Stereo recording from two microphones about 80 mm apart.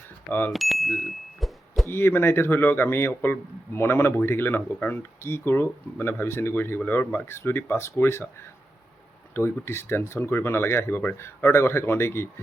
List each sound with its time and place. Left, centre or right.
0.3 s speech: left
0.5 s a sound: centre
1.9 s speech: left
9.3 s speech: left